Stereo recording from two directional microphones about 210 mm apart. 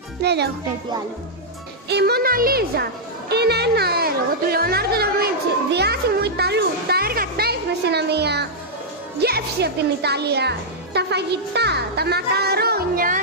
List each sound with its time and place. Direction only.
0.2 s a woman's voice: 50° right (ahead or behind)
1.9 s a woman's voice: 50° right (ahead or behind)